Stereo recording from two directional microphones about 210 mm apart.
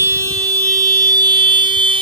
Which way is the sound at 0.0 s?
15° right (ahead or behind).